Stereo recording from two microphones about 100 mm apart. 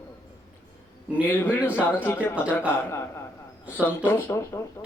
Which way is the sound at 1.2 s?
20° left (ahead or behind).